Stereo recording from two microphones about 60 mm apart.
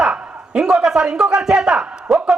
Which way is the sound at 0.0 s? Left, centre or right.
Centre.